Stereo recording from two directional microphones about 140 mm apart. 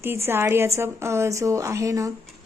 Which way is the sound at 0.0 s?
15° right (ahead or behind).